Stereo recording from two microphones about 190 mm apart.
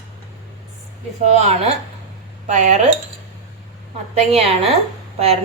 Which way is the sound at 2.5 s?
40° right (ahead or behind).